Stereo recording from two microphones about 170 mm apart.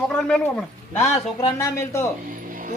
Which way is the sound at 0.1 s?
5° left (ahead or behind).